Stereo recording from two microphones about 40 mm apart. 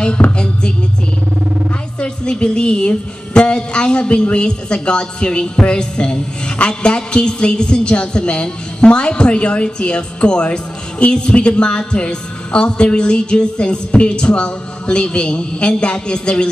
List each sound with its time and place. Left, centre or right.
0.4 s music: left
2.0 s a woman's voice: left